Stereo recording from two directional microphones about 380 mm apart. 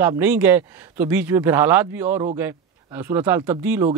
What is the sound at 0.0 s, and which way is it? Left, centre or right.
Speech, centre.